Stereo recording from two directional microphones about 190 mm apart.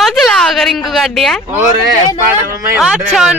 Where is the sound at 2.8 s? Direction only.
5° right (ahead or behind).